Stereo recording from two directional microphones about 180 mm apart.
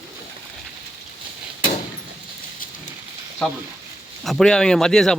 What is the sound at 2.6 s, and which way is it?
Rain, 50° left (ahead or behind).